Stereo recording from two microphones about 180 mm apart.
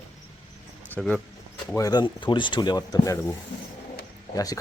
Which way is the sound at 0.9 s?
5° left (ahead or behind).